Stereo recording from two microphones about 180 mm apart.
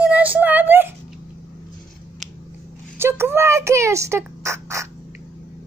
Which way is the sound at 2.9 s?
15° right (ahead or behind).